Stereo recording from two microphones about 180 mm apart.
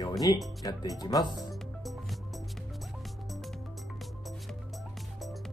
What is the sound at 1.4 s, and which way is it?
Music, centre (ahead or behind).